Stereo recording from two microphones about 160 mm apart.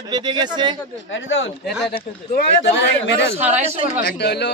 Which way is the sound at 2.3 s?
90° left.